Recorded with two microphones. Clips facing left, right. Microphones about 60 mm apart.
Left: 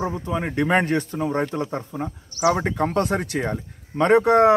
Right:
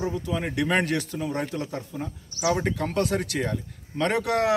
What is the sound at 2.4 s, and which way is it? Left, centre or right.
Speech, left.